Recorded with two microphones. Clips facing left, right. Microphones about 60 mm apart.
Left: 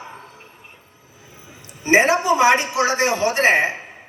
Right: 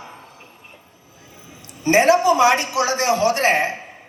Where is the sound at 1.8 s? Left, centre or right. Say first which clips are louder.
Right 2 dB; left.